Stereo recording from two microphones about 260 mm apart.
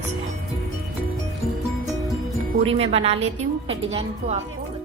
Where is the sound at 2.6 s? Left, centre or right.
Right.